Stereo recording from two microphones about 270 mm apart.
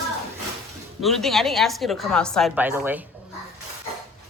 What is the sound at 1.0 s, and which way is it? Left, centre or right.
A woman's voice, centre.